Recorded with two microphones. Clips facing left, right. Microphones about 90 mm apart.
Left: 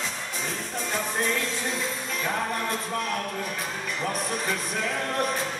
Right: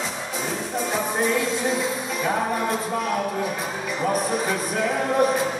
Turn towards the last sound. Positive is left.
turn(degrees=-10)  # may be behind; listen again after turning